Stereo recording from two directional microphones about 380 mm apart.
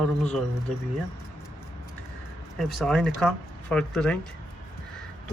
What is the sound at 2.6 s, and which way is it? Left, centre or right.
Speech, centre.